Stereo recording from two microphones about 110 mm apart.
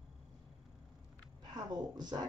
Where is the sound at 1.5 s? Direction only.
40° right (ahead or behind).